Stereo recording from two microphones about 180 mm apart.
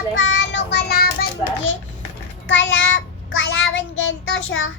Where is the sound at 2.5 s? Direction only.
90° left.